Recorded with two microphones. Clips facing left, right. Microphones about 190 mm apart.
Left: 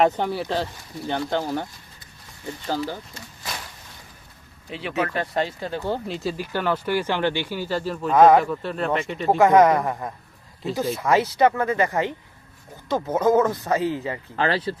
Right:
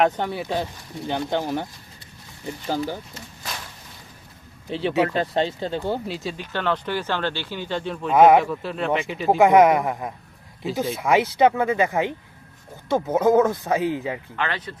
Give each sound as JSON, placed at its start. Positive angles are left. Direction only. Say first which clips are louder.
{"t": 0.0, "sound": "speech", "louder": "left 1 dB", "side_deg": 0}
{"t": 0.4, "sound": "speech", "louder": "even", "side_deg": -15}
{"t": 2.6, "sound": "speech", "louder": "right 1 dB", "side_deg": -15}
{"t": 4.7, "sound": "speech", "louder": "right 5 dB", "side_deg": -30}
{"t": 6.1, "sound": "speech", "louder": "left 2 dB", "side_deg": 0}
{"t": 9.4, "sound": "speech", "louder": "right 1 dB", "side_deg": -15}
{"t": 14.3, "sound": "speech", "louder": "left 5 dB", "side_deg": 35}